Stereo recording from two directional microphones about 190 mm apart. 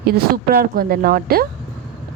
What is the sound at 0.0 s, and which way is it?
Speech, 55° right (ahead or behind).